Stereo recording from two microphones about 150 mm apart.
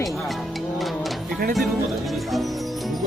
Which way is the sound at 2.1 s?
Centre (ahead or behind).